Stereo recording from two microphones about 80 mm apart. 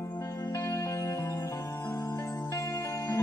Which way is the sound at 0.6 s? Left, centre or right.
Left.